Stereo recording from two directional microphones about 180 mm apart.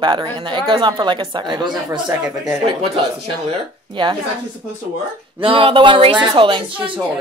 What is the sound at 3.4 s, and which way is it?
Speech, 25° right (ahead or behind).